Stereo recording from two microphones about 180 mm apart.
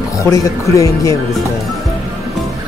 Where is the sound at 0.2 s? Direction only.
15° left (ahead or behind).